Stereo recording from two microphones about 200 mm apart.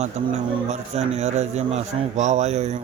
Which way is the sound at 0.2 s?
35° right (ahead or behind).